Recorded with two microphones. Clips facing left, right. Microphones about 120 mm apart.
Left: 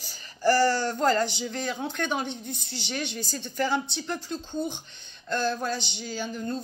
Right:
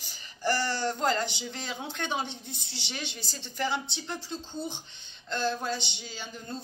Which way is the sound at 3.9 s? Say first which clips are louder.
Left 4 dB; 20° right (ahead or behind).